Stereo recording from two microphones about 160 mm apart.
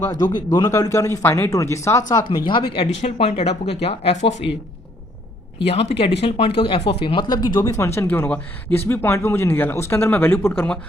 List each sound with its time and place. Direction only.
0.0 s speech: 25° left (ahead or behind)
4.2 s speech: 90° left
5.5 s speech: 35° left (ahead or behind); by 10.8 s 10° left (ahead or behind)